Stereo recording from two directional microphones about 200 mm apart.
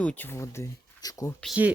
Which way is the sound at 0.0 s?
10° left (ahead or behind).